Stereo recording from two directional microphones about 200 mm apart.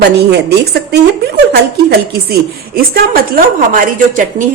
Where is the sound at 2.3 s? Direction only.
50° right (ahead or behind).